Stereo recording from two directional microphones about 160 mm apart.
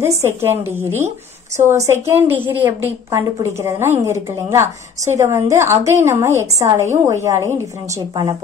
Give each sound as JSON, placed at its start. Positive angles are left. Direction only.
{"t": 0.0, "sound": "a woman's voice", "side_deg": -15}